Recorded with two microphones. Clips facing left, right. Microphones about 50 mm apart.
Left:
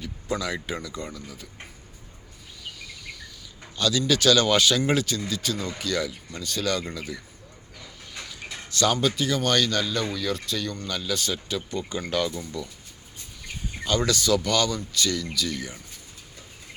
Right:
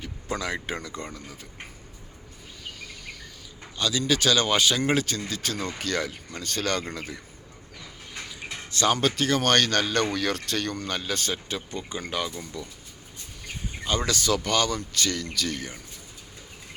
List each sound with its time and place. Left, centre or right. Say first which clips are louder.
0.0 s speech: left 2 dB; right
3.8 s speech: left 2 dB; right
8.7 s speech: even; right
9.0 s speech: right 1 dB; right
10.8 s speech: even; right; by 12.7 s centre
13.8 s speech: left 2 dB; right